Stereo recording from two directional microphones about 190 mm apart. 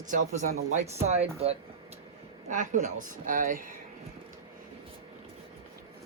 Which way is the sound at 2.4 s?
40° right (ahead or behind).